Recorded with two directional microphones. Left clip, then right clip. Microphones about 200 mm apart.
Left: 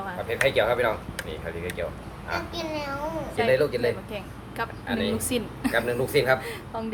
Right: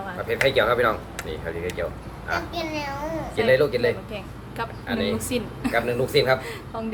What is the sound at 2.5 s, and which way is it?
Speech, 20° right (ahead or behind).